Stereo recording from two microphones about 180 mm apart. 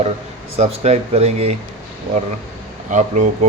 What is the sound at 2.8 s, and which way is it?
Speech, 40° right (ahead or behind).